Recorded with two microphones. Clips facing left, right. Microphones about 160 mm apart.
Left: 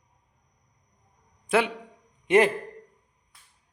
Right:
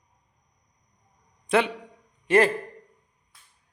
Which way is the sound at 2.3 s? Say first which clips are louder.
Even; 15° left (ahead or behind).